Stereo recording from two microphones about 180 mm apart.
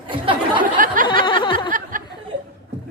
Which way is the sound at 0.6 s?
50° right (ahead or behind).